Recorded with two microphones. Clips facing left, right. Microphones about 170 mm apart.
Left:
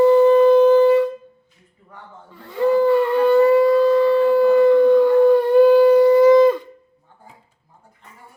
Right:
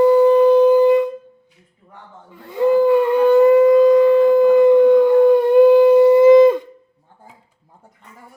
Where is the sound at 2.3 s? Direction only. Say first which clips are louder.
Right 2 dB; 15° right (ahead or behind).